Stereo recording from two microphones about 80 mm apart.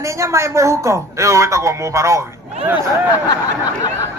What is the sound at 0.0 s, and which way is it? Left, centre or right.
Speech, right.